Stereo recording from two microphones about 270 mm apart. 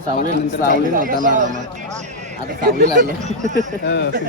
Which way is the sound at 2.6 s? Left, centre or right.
Right.